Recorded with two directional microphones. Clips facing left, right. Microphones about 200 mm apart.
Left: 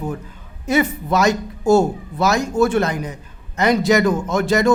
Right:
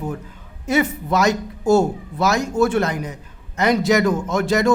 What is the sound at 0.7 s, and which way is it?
A man's voice, 30° left (ahead or behind).